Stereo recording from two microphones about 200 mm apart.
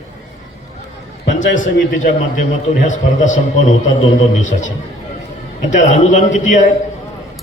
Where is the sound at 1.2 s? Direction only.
70° left (ahead or behind).